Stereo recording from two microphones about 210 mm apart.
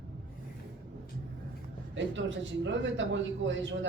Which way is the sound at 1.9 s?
60° right (ahead or behind).